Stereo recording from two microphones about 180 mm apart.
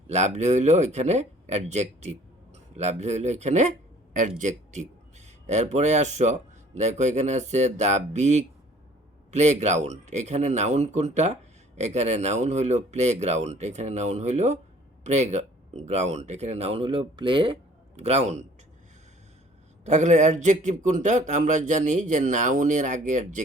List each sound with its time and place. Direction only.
0.1 s a man's voice: 40° right (ahead or behind)
19.8 s a man's voice: 40° right (ahead or behind)